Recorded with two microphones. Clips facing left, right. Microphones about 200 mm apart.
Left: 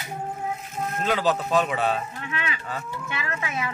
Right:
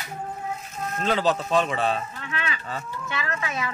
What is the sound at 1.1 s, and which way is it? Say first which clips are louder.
Speech: right 1 dB; 5° left (ahead or behind).